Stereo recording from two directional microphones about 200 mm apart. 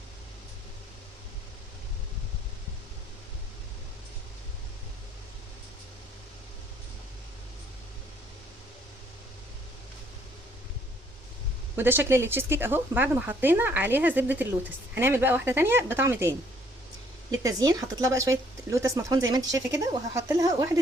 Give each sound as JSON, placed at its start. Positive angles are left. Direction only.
{"t": 11.8, "sound": "speech", "side_deg": -10}
{"t": 17.4, "sound": "speech", "side_deg": -20}